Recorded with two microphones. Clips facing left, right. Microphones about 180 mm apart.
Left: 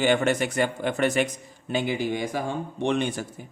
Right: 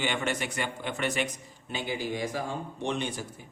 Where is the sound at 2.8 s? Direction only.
80° left.